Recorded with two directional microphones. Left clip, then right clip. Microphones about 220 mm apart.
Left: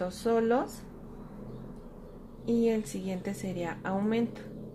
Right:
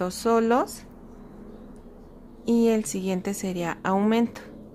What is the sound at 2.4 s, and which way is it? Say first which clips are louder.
Speech: right 6 dB; 30° right (ahead or behind).